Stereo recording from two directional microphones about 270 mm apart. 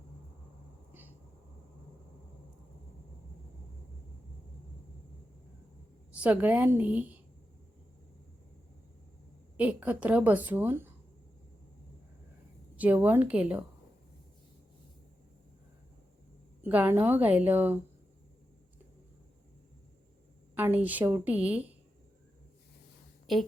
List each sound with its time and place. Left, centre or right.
6.1 s a woman's voice: centre
9.6 s a woman's voice: centre
12.7 s a woman's voice: centre
16.6 s a woman's voice: centre
20.6 s a woman's voice: centre